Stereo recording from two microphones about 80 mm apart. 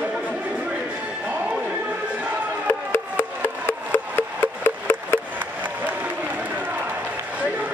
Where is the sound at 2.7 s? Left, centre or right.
Left.